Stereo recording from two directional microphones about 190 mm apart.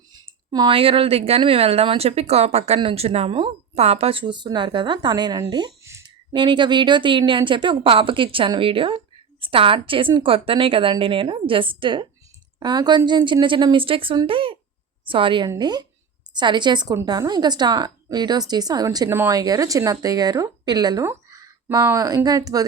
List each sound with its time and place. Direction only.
0.1 s a woman's voice: 20° right (ahead or behind)